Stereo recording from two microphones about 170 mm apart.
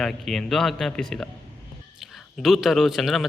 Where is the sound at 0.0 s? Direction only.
Centre (ahead or behind).